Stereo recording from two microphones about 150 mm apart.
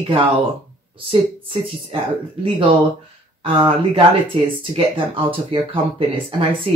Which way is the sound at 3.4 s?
35° right (ahead or behind).